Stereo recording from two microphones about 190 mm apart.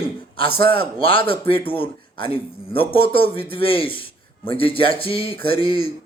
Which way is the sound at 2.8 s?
30° left (ahead or behind).